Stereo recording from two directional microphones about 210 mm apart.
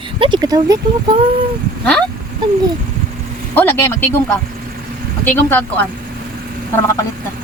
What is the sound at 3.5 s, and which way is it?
Speech, 10° left (ahead or behind).